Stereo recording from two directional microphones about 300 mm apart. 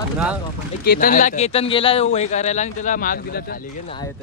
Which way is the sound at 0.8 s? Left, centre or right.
Left.